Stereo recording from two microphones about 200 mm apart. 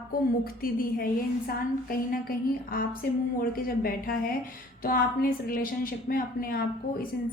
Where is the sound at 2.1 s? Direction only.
45° left (ahead or behind).